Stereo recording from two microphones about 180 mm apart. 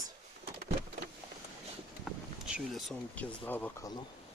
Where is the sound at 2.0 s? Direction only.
5° right (ahead or behind).